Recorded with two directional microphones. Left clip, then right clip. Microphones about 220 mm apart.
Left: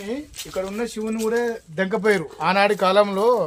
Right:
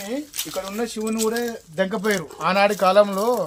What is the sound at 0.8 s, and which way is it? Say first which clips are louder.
Speech: right 1 dB; 20° left (ahead or behind).